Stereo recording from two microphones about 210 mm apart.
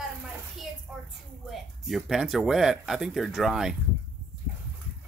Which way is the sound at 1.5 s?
Centre (ahead or behind).